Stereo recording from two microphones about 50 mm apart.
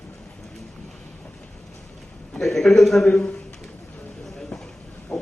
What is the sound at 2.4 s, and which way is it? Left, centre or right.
Speech, centre.